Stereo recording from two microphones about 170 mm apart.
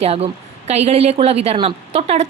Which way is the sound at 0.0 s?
35° right (ahead or behind).